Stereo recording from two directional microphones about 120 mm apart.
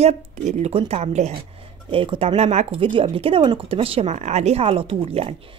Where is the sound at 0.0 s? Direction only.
65° right (ahead or behind).